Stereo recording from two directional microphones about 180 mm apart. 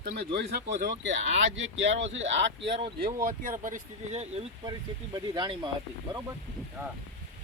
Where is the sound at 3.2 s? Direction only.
50° right (ahead or behind).